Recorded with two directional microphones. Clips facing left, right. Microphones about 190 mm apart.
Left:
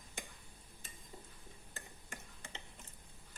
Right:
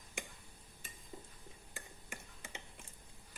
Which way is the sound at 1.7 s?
10° right (ahead or behind).